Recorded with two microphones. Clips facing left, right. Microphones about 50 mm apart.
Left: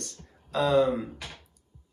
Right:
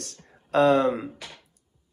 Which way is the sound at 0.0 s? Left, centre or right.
Right.